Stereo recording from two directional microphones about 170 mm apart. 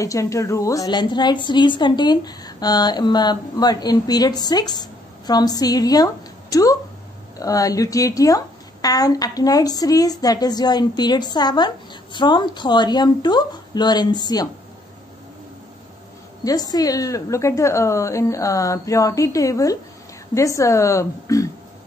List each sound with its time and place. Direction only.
0.0 s a woman's voice: 20° left (ahead or behind)
16.4 s a woman's voice: 20° left (ahead or behind)